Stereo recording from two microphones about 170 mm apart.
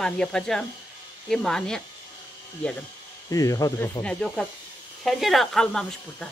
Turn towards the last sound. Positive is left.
turn(degrees=5)  # may be behind; listen again after turning